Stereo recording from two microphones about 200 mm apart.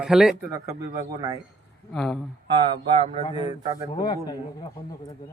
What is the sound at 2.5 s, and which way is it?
A man's voice, 30° right (ahead or behind).